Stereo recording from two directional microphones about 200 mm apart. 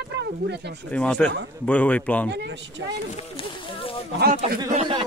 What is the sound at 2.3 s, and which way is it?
Speech, 60° right (ahead or behind).